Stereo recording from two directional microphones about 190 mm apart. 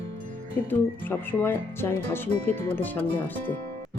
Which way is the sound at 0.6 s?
10° left (ahead or behind).